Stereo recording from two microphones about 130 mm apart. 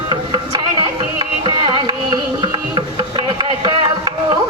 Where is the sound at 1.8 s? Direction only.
35° right (ahead or behind).